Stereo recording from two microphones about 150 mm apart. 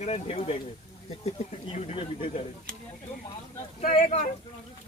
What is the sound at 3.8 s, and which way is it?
Speech, 50° left (ahead or behind).